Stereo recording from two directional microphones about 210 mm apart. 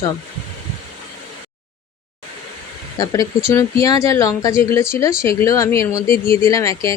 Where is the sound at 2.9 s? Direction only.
15° left (ahead or behind).